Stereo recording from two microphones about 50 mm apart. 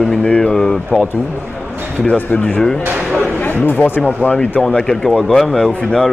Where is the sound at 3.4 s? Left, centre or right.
Left.